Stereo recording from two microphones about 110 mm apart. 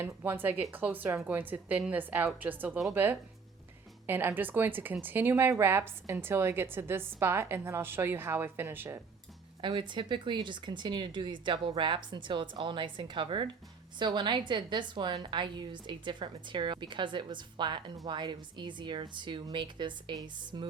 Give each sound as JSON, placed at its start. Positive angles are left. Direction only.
{"t": 0.0, "sound": "a woman's voice", "side_deg": -20}
{"t": 9.6, "sound": "speech", "side_deg": -45}